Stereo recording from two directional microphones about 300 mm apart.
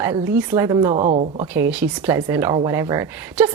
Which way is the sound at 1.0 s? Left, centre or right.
Right.